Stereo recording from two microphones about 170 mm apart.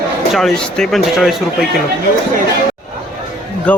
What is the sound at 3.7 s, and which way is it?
Speech, 10° left (ahead or behind).